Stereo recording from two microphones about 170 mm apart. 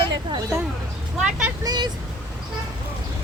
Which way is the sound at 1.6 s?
25° right (ahead or behind).